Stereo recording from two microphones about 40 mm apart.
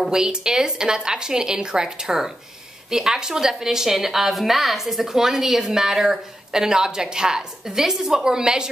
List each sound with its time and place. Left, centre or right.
0.1 s a woman's voice: centre